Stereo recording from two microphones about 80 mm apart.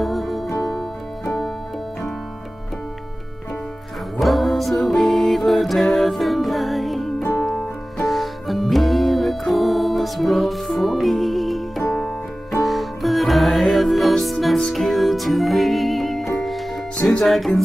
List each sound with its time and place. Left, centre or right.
0.0 s music: centre
4.2 s music: centre
7.2 s music: left
7.4 s music: centre